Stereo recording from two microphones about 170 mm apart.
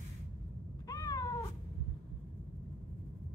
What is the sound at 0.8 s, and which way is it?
Cat, 20° left (ahead or behind).